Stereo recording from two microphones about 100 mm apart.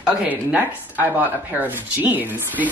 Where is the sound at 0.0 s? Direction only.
10° right (ahead or behind).